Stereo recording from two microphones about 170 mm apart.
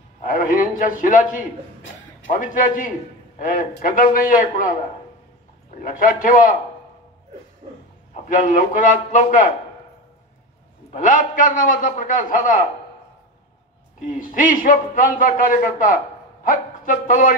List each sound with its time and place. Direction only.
0.2 s a man's voice: 55° left (ahead or behind)
5.8 s a man's voice: 50° left (ahead or behind)
8.1 s a man's voice: 50° left (ahead or behind)
10.9 s a man's voice: 50° left (ahead or behind)
14.2 s a man's voice: 50° left (ahead or behind)